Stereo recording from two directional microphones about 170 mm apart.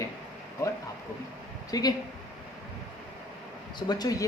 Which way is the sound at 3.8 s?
25° left (ahead or behind).